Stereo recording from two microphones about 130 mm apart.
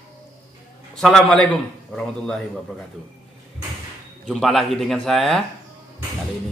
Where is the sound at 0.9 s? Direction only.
Centre (ahead or behind).